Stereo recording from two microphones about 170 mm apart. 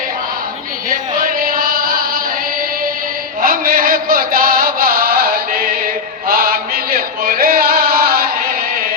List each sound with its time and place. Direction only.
1.2 s music: 55° right (ahead or behind)
3.4 s chant: 60° right (ahead or behind)